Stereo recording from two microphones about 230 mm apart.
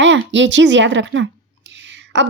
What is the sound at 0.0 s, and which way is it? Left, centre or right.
A child's voice, right.